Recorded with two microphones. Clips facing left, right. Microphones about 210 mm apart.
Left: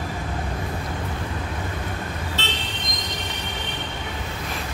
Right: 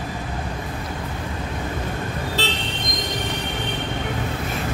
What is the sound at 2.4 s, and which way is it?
Vehicle, 35° right (ahead or behind).